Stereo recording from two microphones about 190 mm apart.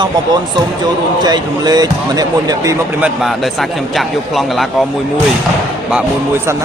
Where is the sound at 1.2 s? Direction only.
20° right (ahead or behind).